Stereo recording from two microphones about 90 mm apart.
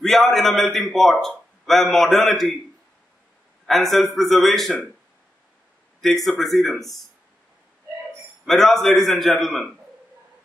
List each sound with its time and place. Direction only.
0.0 s a man's voice: 5° left (ahead or behind)
3.6 s a man's voice: centre (ahead or behind)
5.9 s a man's voice: centre (ahead or behind)
8.5 s a man's voice: 5° left (ahead or behind)